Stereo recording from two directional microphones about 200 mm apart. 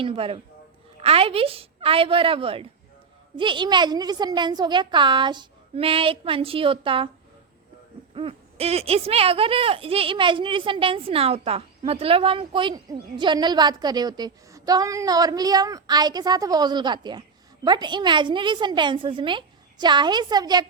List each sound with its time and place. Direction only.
0.0 s a woman's voice: 30° right (ahead or behind)
8.1 s speech: 30° right (ahead or behind)